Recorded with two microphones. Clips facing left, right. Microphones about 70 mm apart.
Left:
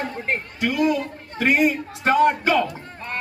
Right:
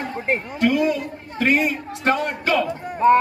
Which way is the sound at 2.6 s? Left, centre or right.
Centre.